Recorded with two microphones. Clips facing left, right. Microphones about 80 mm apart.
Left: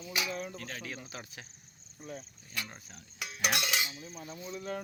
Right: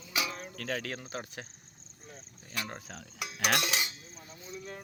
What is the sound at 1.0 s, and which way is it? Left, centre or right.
Speech, right.